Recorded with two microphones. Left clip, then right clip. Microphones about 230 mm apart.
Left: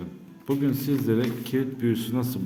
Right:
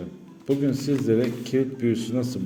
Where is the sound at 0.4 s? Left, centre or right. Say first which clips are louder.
Right 2 dB; centre.